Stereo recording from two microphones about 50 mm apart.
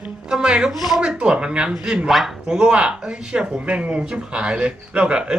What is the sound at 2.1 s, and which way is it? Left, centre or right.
Speech, centre.